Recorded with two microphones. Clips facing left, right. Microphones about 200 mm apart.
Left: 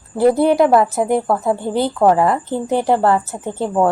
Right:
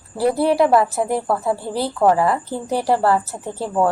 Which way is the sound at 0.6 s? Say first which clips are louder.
Even; 45° left (ahead or behind).